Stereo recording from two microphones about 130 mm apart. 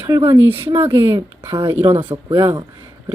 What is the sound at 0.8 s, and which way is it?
Speech, 45° right (ahead or behind).